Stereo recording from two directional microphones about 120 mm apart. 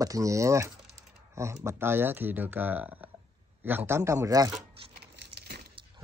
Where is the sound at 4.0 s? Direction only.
25° right (ahead or behind).